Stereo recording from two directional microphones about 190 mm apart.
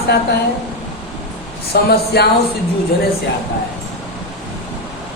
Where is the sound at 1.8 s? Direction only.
60° left (ahead or behind).